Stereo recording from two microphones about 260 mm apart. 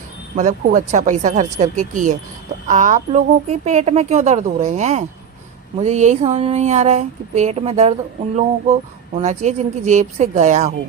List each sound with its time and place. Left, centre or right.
0.3 s speech: right